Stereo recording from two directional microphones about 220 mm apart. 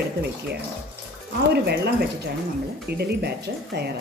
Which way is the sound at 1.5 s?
45° right (ahead or behind).